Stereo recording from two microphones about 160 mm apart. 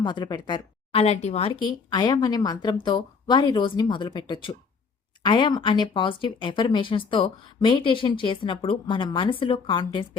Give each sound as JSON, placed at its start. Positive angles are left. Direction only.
{"t": 0.0, "sound": "a woman's voice", "side_deg": 25}
{"t": 1.0, "sound": "speech", "side_deg": 40}
{"t": 1.6, "sound": "a woman's voice", "side_deg": 25}